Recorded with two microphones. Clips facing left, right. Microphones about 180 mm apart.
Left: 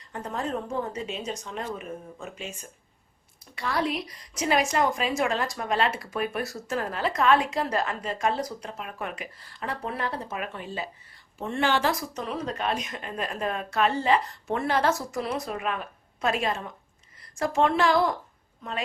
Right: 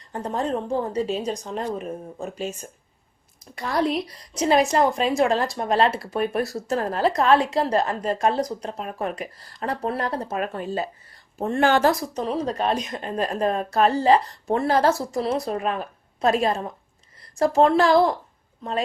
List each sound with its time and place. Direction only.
0.1 s a woman's voice: 35° right (ahead or behind)